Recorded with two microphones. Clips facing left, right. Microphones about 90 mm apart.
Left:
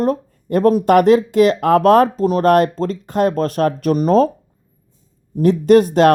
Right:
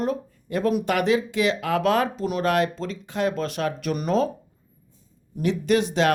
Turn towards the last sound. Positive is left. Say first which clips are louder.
# left 10 dB
turn(degrees=45)  # may be behind; listen again after turning